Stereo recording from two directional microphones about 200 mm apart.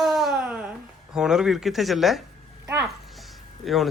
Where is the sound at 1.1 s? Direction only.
5° right (ahead or behind).